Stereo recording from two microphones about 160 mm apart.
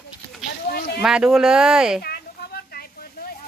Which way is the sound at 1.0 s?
5° right (ahead or behind).